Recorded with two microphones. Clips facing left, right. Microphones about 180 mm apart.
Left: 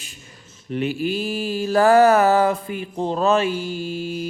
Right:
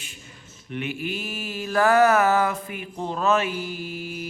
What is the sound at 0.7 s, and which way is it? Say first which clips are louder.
Mantra: left 7 dB; 35° left (ahead or behind).